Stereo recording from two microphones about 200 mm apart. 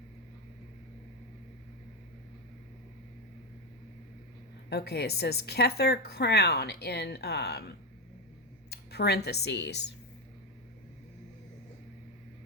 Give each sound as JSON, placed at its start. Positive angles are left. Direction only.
{"t": 4.7, "sound": "a woman's voice", "side_deg": 55}